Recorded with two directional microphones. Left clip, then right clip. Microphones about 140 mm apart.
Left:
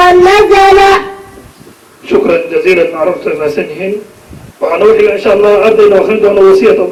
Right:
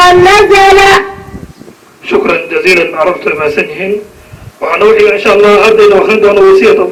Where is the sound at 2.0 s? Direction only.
30° right (ahead or behind).